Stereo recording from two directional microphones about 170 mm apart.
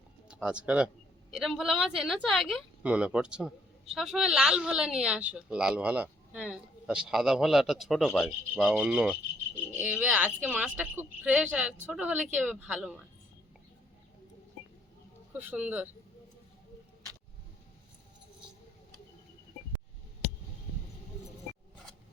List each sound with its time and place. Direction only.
0.3 s a woman's voice: 5° right (ahead or behind)
15.3 s a woman's voice: 10° right (ahead or behind)